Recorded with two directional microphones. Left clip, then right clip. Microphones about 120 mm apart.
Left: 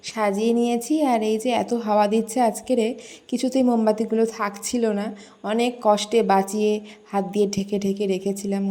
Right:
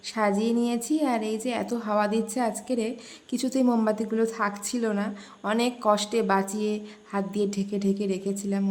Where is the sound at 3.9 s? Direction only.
25° left (ahead or behind).